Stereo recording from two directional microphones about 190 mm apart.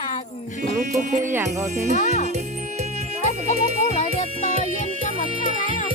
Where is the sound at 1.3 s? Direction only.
15° right (ahead or behind).